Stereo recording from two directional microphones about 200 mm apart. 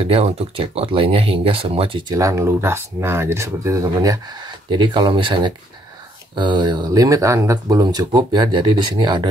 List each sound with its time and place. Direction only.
0.0 s speech: 30° right (ahead or behind)